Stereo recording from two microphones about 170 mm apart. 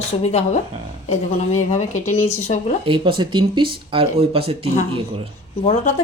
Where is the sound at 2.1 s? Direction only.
15° left (ahead or behind).